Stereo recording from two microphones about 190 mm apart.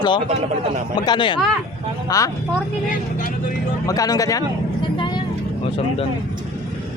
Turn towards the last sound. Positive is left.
turn(degrees=25)  # may be behind; listen again after turning